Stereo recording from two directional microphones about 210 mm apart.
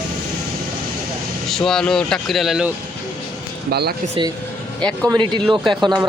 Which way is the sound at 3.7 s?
50° right (ahead or behind).